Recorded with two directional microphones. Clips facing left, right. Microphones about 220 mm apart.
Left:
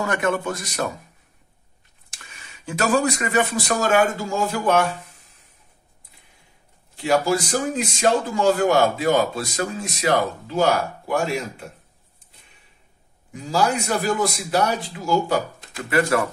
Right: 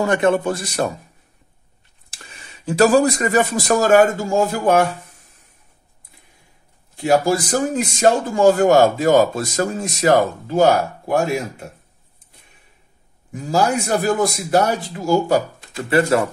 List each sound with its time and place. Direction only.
0.0 s a man's voice: 30° right (ahead or behind)
2.1 s speech: 35° right (ahead or behind)
7.0 s speech: 45° right (ahead or behind)
14.0 s speech: 50° right (ahead or behind)
15.7 s a man's voice: 25° right (ahead or behind)